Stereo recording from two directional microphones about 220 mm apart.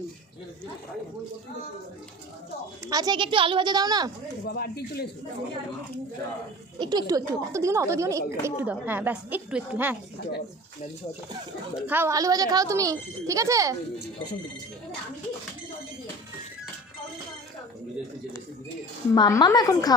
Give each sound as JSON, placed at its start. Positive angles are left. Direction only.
{"t": 2.9, "sound": "a child's voice", "side_deg": -20}
{"t": 4.4, "sound": "speech", "side_deg": 45}
{"t": 6.7, "sound": "a child's voice", "side_deg": -20}
{"t": 11.9, "sound": "a child's voice", "side_deg": -10}
{"t": 19.1, "sound": "a woman's voice", "side_deg": 20}